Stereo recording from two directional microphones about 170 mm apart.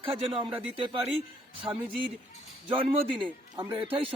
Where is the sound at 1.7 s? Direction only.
20° right (ahead or behind).